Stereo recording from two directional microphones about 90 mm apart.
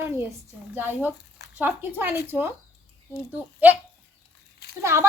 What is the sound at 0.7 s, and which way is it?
Speech, 20° right (ahead or behind).